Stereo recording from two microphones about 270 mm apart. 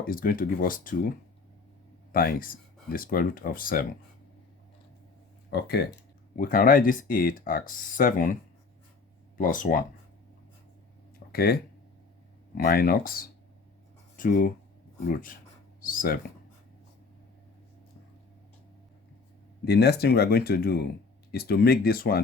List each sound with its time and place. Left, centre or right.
0.0 s speech: left
2.1 s speech: left
5.5 s speech: left
9.4 s speech: left
11.3 s speech: left
15.8 s speech: left
19.6 s speech: left